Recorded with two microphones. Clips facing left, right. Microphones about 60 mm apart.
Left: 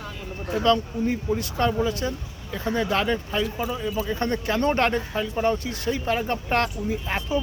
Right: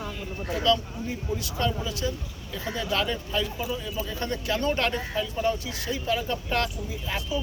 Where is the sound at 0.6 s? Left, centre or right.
Left.